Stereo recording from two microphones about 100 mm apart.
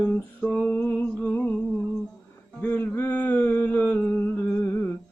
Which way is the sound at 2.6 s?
20° left (ahead or behind).